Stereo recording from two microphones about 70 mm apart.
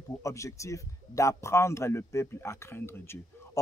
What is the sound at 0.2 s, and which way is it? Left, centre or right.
Speech, left.